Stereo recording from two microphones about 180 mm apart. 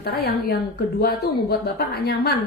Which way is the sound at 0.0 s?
60° left (ahead or behind).